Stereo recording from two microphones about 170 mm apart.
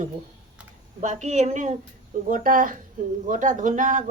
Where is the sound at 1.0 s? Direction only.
45° right (ahead or behind).